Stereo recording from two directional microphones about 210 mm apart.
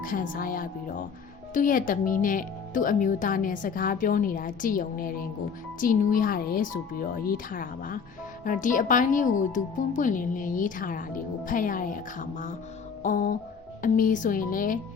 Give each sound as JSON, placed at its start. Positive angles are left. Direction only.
{"t": 0.0, "sound": "a woman's voice", "side_deg": 40}
{"t": 13.0, "sound": "music", "side_deg": 40}
{"t": 13.8, "sound": "a woman's voice", "side_deg": 40}